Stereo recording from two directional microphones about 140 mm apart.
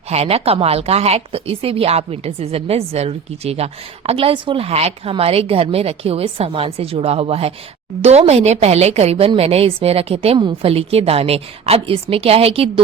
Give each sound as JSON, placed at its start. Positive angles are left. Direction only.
{"t": 0.1, "sound": "speech", "side_deg": -45}